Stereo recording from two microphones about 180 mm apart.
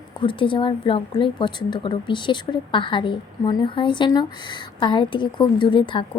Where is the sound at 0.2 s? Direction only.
25° left (ahead or behind).